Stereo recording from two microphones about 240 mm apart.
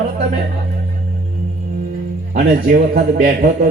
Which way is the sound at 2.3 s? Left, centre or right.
Right.